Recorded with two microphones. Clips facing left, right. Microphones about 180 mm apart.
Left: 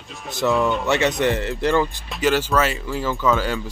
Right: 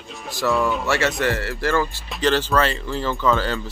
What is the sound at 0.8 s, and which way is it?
Speech, 20° left (ahead or behind).